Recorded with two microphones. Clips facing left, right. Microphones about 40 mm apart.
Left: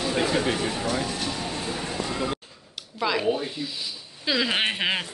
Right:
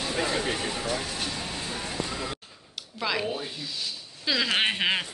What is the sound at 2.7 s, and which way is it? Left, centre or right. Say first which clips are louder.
Speech: left 3 dB; centre.